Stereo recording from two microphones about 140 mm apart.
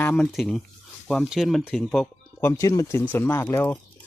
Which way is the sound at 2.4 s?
20° left (ahead or behind).